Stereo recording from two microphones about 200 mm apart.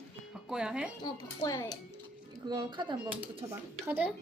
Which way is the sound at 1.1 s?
20° left (ahead or behind).